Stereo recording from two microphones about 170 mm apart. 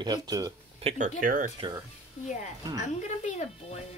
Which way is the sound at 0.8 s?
45° right (ahead or behind).